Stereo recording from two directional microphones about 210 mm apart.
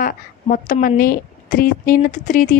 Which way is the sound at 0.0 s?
40° left (ahead or behind).